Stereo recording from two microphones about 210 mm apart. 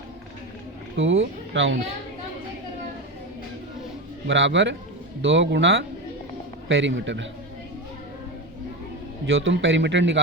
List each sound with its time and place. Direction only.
0.9 s a man's voice: 65° right (ahead or behind)
4.3 s a man's voice: 60° right (ahead or behind)
9.2 s a man's voice: 65° right (ahead or behind)